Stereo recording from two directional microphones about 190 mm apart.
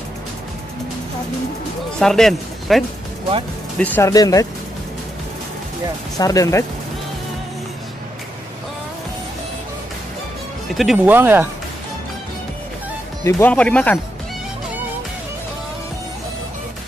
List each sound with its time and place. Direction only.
1.9 s speech: 5° left (ahead or behind); by 4.5 s 20° left (ahead or behind)
6.1 s speech: 20° left (ahead or behind)
10.8 s speech: 5° right (ahead or behind)
13.2 s speech: 10° left (ahead or behind)